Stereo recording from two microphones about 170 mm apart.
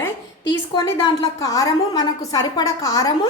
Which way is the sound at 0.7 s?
25° left (ahead or behind).